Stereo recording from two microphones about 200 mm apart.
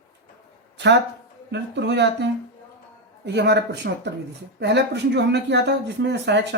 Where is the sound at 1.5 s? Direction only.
60° right (ahead or behind).